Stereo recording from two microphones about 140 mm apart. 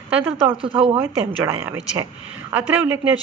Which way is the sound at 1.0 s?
15° right (ahead or behind).